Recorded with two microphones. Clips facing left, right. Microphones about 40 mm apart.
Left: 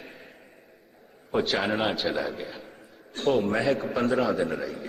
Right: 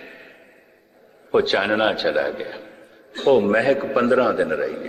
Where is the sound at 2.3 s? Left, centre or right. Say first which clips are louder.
Right 6 dB; right.